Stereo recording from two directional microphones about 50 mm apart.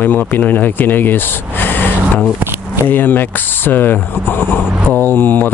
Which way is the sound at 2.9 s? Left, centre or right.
Left.